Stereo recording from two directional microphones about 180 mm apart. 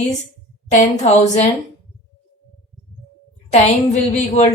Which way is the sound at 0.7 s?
40° left (ahead or behind).